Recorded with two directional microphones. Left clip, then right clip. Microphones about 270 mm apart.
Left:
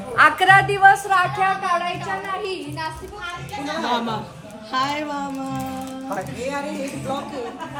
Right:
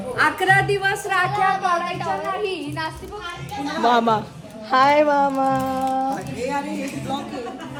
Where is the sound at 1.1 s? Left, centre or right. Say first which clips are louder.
Left 1 dB; left.